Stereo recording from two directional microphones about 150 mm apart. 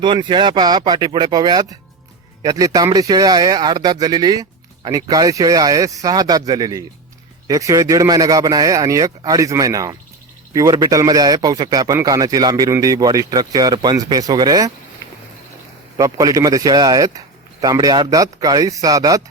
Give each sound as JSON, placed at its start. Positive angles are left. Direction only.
{"t": 0.0, "sound": "speech", "side_deg": -30}
{"t": 16.0, "sound": "speech", "side_deg": -25}